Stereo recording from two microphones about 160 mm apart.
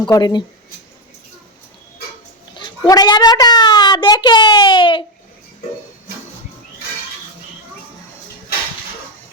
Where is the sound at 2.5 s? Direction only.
25° left (ahead or behind).